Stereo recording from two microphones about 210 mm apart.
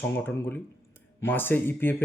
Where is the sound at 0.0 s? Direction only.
10° left (ahead or behind).